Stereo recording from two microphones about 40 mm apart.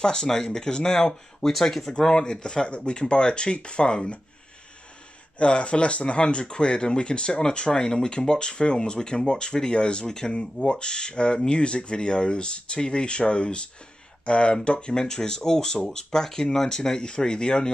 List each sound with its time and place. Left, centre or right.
0.0 s speech: centre
5.4 s speech: left